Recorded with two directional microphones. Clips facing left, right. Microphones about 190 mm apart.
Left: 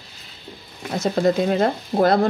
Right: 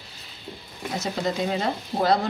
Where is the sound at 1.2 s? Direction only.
55° left (ahead or behind).